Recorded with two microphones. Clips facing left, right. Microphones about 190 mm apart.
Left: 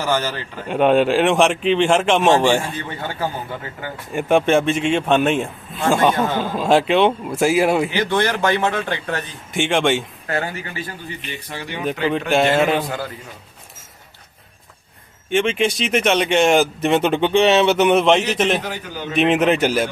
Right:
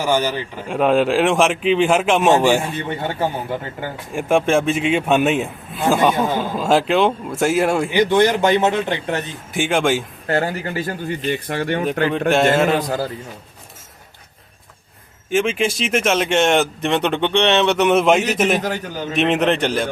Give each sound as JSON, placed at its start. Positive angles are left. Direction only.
{"t": 0.0, "sound": "speech", "side_deg": -10}
{"t": 0.7, "sound": "a man's voice", "side_deg": 0}
{"t": 2.9, "sound": "a man's voice", "side_deg": -25}
{"t": 4.1, "sound": "a man's voice", "side_deg": 0}
{"t": 7.9, "sound": "a man's voice", "side_deg": -15}
{"t": 9.5, "sound": "a man's voice", "side_deg": 0}
{"t": 10.2, "sound": "speech", "side_deg": -35}
{"t": 10.6, "sound": "speech", "side_deg": -45}
{"t": 12.3, "sound": "a man's voice", "side_deg": 0}
{"t": 12.8, "sound": "speech", "side_deg": -35}
{"t": 15.3, "sound": "a man's voice", "side_deg": -5}